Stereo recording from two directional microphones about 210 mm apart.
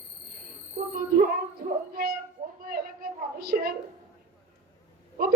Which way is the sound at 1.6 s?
45° right (ahead or behind).